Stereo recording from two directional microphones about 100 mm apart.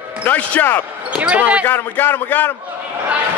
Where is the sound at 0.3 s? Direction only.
20° left (ahead or behind).